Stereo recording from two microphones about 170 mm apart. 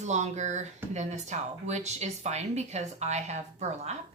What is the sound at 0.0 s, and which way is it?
Speech, 45° right (ahead or behind).